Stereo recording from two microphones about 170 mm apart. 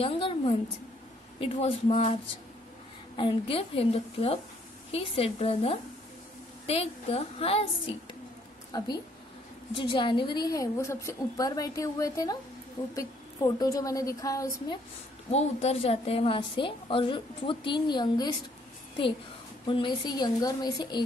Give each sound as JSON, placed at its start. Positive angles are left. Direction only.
{"t": 0.0, "sound": "a woman's voice", "side_deg": 35}
{"t": 3.2, "sound": "a woman's voice", "side_deg": 30}
{"t": 8.7, "sound": "a woman's voice", "side_deg": 25}
{"t": 15.3, "sound": "a woman's voice", "side_deg": 35}
{"t": 19.6, "sound": "a woman's voice", "side_deg": 30}